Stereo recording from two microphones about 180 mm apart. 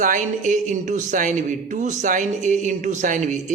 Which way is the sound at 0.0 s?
45° right (ahead or behind).